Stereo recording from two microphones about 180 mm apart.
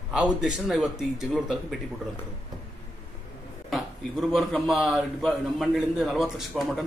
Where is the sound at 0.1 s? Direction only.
5° right (ahead or behind).